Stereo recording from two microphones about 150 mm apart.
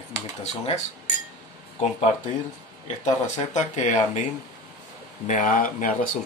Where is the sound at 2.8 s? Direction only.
55° left (ahead or behind).